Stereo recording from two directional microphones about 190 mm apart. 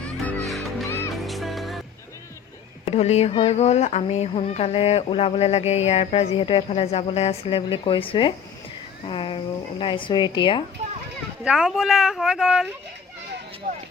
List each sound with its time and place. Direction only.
0.0 s music: 5° left (ahead or behind)
2.8 s speech: 35° left (ahead or behind)
11.4 s speech: 5° right (ahead or behind)